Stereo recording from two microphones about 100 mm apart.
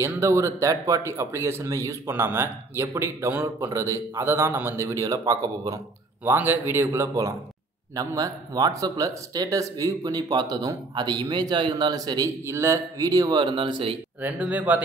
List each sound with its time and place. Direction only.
0.0 s a man's voice: 30° right (ahead or behind)
6.2 s a man's voice: 20° right (ahead or behind); by 13.4 s 40° right (ahead or behind)
13.4 s speech: 55° right (ahead or behind)
14.2 s speech: 15° right (ahead or behind)